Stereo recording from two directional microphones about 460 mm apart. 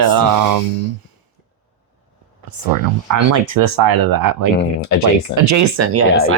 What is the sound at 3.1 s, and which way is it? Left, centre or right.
Speech, right.